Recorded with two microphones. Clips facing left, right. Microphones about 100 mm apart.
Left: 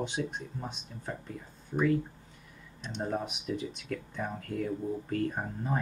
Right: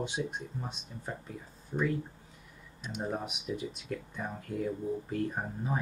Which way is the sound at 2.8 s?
5° right (ahead or behind).